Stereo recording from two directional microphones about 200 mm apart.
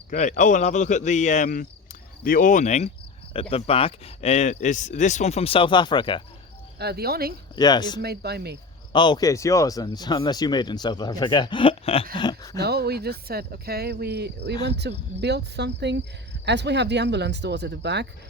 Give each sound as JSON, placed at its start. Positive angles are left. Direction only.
{"t": 0.1, "sound": "speech", "side_deg": 40}
{"t": 6.7, "sound": "speech", "side_deg": -55}
{"t": 7.5, "sound": "speech", "side_deg": 20}
{"t": 8.0, "sound": "speech", "side_deg": -55}
{"t": 8.9, "sound": "speech", "side_deg": 20}
{"t": 12.1, "sound": "a sound", "side_deg": 20}
{"t": 12.5, "sound": "speech", "side_deg": -55}